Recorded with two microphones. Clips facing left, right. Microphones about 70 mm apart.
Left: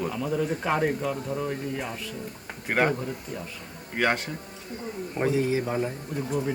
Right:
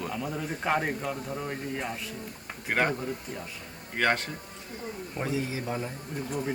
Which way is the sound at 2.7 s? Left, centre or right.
Centre.